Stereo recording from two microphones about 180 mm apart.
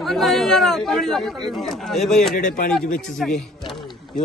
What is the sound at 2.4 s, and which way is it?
Speech, 45° left (ahead or behind).